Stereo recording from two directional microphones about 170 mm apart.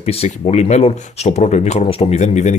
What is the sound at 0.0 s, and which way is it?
Speech, 35° left (ahead or behind).